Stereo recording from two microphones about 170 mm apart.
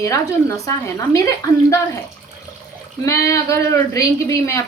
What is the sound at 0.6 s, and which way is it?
Speech, 20° left (ahead or behind).